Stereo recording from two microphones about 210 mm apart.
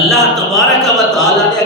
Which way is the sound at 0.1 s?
Centre (ahead or behind).